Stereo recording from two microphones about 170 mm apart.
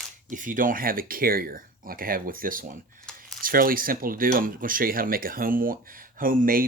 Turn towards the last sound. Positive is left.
turn(degrees=-55)  # may be behind; listen again after turning